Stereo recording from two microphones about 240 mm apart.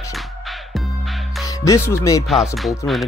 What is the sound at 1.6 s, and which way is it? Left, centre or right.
Speech, centre.